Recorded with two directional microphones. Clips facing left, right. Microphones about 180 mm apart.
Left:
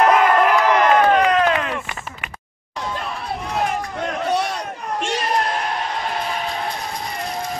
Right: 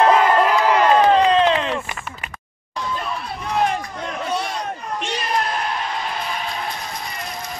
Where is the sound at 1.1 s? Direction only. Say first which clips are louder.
Right 1 dB; 30° right (ahead or behind).